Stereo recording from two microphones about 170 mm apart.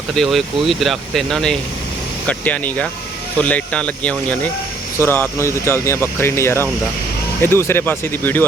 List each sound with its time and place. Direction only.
0.1 s speech: centre (ahead or behind)